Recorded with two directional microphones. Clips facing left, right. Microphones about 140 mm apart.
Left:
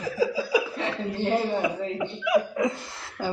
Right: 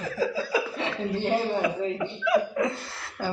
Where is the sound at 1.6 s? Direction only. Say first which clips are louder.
Right 1 dB; 15° left (ahead or behind).